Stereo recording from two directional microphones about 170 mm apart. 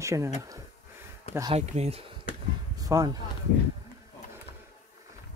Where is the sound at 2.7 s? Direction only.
20° right (ahead or behind).